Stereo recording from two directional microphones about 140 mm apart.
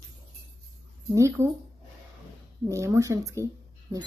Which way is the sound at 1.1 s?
20° right (ahead or behind).